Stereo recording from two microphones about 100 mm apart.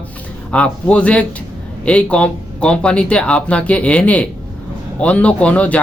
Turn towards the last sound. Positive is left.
turn(degrees=15)  # may be behind; listen again after turning